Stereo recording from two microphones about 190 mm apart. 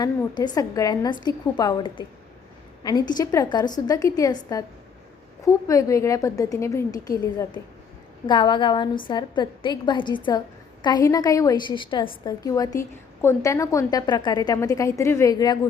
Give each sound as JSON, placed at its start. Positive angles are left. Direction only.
{"t": 0.0, "sound": "a woman's voice", "side_deg": 20}
{"t": 8.3, "sound": "a woman's voice", "side_deg": 25}